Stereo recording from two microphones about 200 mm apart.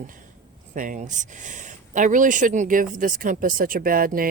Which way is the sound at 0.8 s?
40° right (ahead or behind).